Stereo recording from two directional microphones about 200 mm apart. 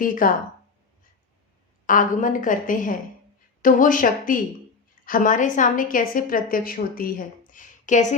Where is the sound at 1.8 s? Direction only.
40° left (ahead or behind).